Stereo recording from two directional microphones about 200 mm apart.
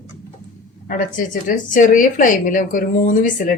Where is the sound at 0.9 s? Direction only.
40° left (ahead or behind).